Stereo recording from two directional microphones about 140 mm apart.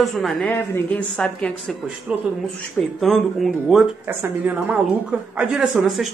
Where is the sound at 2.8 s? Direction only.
Centre (ahead or behind).